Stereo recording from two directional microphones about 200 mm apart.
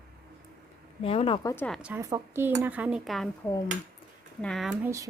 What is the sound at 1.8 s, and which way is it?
Speech, 10° right (ahead or behind).